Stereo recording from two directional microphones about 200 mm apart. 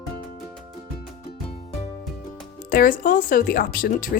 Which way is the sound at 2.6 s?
45° left (ahead or behind).